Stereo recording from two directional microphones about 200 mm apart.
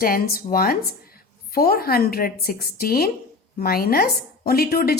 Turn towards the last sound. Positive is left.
turn(degrees=50)  # may be behind; listen again after turning